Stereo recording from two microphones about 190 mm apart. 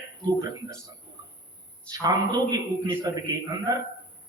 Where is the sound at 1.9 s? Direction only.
20° right (ahead or behind).